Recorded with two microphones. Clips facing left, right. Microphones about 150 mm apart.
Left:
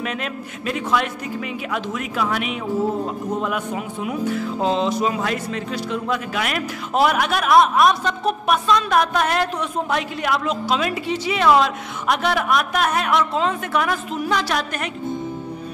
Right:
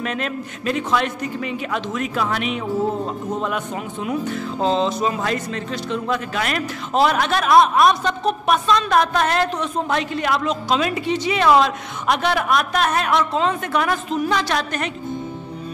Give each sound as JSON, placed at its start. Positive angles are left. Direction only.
{"t": 0.0, "sound": "speech", "side_deg": 5}